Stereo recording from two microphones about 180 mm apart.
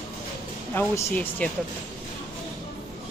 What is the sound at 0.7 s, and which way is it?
Speech, 10° left (ahead or behind).